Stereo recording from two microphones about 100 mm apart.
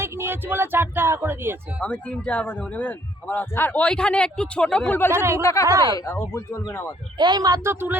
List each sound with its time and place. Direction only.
0.0 s speech: 25° right (ahead or behind)
1.8 s a man's voice: 10° left (ahead or behind)
5.4 s speech: 30° left (ahead or behind)
5.6 s speech: 35° right (ahead or behind)
6.0 s speech: 30° left (ahead or behind)
7.2 s speech: 45° right (ahead or behind)
7.6 s speech: 25° right (ahead or behind)